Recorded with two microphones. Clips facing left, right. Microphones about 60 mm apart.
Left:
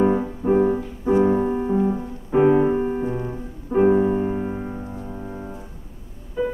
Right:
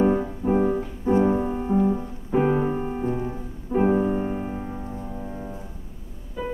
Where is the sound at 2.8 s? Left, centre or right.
Centre.